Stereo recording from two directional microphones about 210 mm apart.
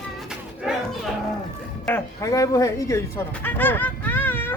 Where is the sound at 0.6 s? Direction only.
Centre (ahead or behind).